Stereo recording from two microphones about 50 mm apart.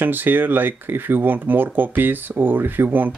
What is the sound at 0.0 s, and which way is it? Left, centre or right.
Speech, right.